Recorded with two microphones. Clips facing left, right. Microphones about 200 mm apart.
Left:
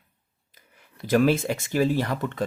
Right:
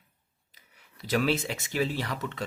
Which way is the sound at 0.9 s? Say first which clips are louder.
Left 6 dB; 50° left (ahead or behind).